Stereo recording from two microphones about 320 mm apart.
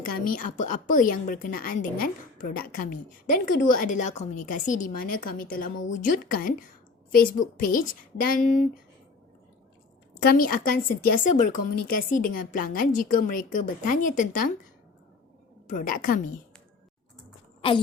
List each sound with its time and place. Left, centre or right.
0.0 s a woman's voice: left
10.2 s a woman's voice: left
15.6 s a woman's voice: left
17.6 s a woman's voice: centre